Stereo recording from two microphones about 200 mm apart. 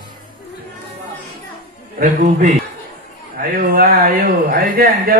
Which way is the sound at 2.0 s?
40° right (ahead or behind).